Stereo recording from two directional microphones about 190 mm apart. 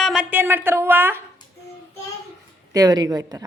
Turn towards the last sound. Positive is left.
turn(degrees=-20)  # may be behind; listen again after turning